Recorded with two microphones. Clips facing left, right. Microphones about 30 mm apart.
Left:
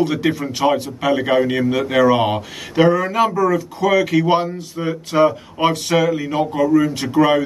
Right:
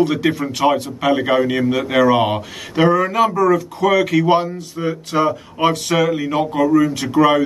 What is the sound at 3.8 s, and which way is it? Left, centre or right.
Speech, right.